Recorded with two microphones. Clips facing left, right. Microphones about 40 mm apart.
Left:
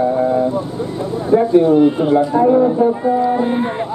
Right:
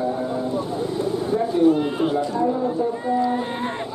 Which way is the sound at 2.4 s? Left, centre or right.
Left.